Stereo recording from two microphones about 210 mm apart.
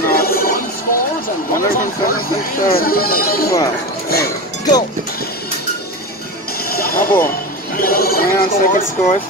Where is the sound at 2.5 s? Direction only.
45° left (ahead or behind).